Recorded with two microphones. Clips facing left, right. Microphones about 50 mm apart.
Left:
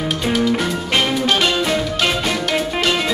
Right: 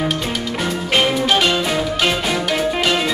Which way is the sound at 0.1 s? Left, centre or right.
Centre.